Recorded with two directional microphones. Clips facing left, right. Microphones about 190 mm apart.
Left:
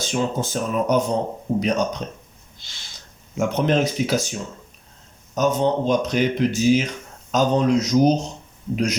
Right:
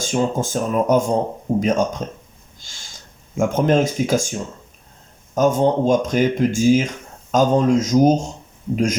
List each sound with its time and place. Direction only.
0.0 s speech: 45° right (ahead or behind)
2.6 s a sound: 45° right (ahead or behind)
3.3 s speech: 45° right (ahead or behind)